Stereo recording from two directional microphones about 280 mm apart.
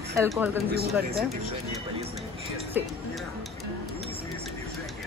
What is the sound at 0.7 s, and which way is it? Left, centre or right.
Speech, right.